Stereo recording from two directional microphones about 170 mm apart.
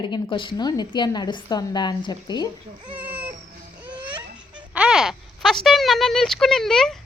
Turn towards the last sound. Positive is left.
turn(degrees=0)  # may be behind; listen again after turning